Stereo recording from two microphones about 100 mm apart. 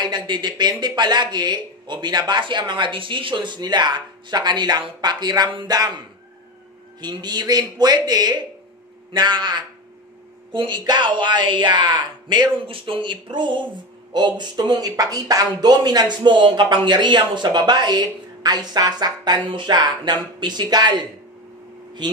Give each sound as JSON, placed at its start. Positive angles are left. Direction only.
{"t": 0.0, "sound": "speech", "side_deg": -50}
{"t": 5.5, "sound": "speech", "side_deg": -55}
{"t": 5.8, "sound": "speech", "side_deg": -45}
{"t": 22.0, "sound": "speech", "side_deg": -45}